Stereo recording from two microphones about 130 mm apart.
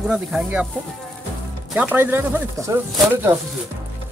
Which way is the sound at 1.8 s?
15° right (ahead or behind).